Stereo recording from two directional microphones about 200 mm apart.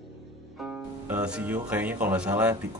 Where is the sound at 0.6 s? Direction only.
5° right (ahead or behind).